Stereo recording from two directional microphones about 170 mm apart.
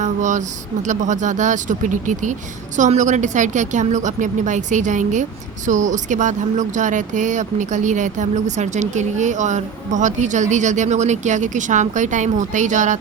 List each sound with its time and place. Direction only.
0.0 s speech: 45° right (ahead or behind)